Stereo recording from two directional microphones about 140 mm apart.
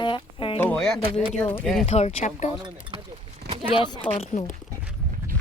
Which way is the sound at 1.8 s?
50° left (ahead or behind).